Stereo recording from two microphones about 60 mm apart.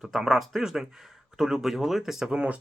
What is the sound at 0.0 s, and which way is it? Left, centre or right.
Speech, centre.